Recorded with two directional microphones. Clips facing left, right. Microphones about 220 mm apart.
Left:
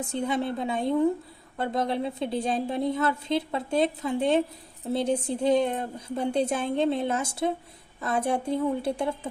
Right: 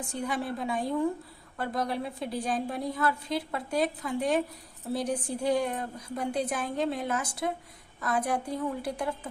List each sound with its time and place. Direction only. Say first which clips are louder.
0.0 s a woman's voice: left 5 dB; 25° left (ahead or behind)